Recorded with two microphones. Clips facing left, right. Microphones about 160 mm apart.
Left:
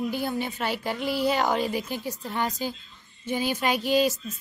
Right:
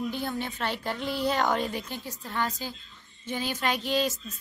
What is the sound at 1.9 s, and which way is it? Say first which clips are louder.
A woman's voice: left 4 dB; 20° left (ahead or behind).